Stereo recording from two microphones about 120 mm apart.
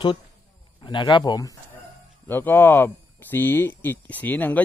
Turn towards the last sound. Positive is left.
turn(degrees=15)  # may be behind; listen again after turning